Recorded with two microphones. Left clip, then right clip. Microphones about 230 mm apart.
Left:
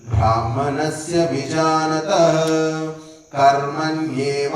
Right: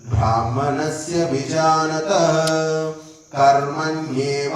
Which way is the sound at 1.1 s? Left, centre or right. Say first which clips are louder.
Left 1 dB; left.